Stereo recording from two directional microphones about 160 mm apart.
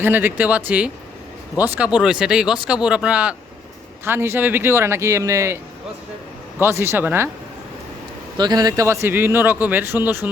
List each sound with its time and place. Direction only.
0.0 s a man's voice: 10° right (ahead or behind)
6.6 s a man's voice: 15° right (ahead or behind)
8.4 s a man's voice: 25° right (ahead or behind)